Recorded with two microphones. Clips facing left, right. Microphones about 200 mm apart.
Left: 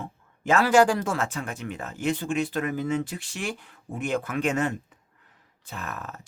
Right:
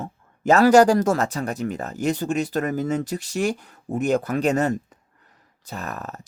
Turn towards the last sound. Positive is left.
turn(degrees=-40)  # may be behind; listen again after turning